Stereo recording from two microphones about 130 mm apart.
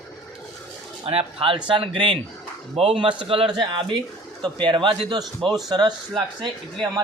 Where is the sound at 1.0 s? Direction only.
45° right (ahead or behind).